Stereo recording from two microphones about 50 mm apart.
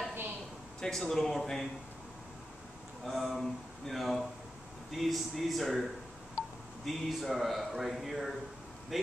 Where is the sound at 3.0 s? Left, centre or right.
Centre.